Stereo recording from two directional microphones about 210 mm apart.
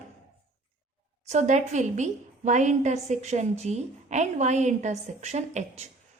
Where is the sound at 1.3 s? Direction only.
35° right (ahead or behind).